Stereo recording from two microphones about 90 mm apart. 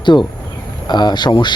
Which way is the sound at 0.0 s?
60° left (ahead or behind).